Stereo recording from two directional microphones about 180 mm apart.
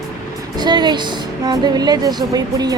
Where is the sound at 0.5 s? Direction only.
25° right (ahead or behind).